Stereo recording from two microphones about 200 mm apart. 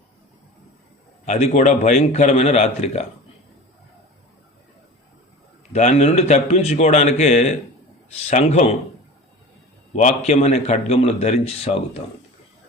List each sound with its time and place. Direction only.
1.2 s speech: 35° left (ahead or behind)
5.7 s speech: 35° left (ahead or behind)
9.9 s speech: 35° left (ahead or behind)